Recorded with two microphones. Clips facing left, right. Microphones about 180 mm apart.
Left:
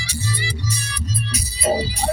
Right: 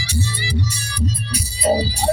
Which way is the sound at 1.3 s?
35° right (ahead or behind).